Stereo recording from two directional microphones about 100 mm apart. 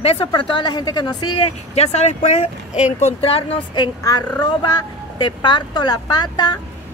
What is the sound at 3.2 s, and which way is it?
Speech, 80° left.